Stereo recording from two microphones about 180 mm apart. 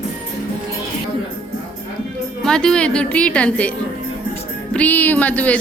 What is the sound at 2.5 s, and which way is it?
A woman's voice, 5° left (ahead or behind).